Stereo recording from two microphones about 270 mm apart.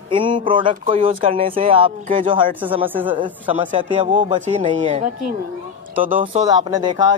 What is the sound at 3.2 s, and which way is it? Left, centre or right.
Speech, centre.